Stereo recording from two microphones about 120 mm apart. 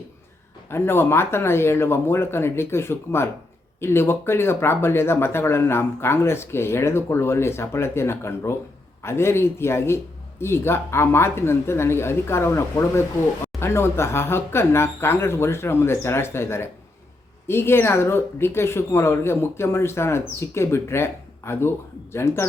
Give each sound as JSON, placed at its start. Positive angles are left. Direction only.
{"t": 0.7, "sound": "speech", "side_deg": 20}